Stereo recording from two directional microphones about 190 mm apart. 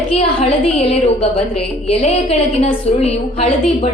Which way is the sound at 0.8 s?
30° left (ahead or behind).